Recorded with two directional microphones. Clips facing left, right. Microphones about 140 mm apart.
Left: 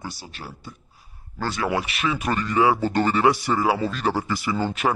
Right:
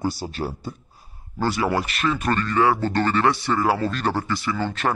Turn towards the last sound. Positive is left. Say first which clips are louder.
# left 1 dB
turn(degrees=10)  # may be behind; listen again after turning